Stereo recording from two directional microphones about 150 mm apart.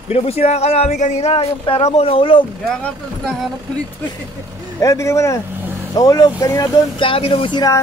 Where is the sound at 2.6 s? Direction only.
5° left (ahead or behind).